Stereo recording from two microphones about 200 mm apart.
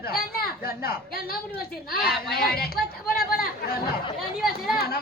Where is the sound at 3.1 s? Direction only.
50° left (ahead or behind).